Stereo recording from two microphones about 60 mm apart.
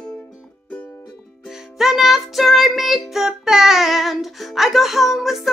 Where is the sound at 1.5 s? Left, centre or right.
Centre.